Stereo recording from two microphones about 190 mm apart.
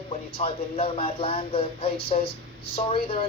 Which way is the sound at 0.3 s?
30° left (ahead or behind).